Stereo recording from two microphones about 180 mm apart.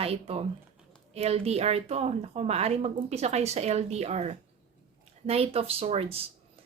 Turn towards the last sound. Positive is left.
turn(degrees=-35)  # may be behind; listen again after turning